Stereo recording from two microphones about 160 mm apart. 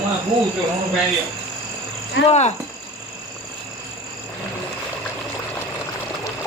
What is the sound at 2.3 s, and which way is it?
Speech, 45° left (ahead or behind).